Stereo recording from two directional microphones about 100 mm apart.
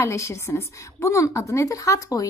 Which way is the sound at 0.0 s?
30° left (ahead or behind).